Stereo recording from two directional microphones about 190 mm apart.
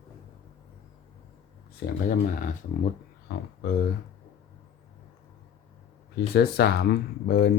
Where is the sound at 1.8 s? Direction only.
55° left (ahead or behind).